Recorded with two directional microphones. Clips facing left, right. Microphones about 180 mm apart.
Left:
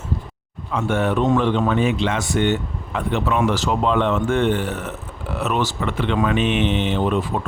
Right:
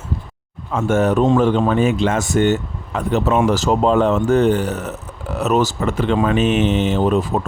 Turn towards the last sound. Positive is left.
turn(degrees=-40)  # may be behind; listen again after turning